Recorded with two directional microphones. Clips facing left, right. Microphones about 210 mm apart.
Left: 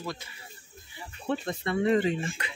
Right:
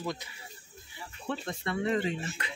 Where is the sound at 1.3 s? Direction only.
20° left (ahead or behind).